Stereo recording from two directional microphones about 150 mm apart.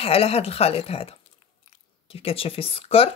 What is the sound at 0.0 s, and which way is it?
Speech, 40° left (ahead or behind).